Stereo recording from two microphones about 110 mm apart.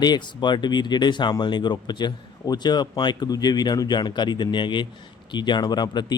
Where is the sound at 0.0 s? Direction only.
40° left (ahead or behind).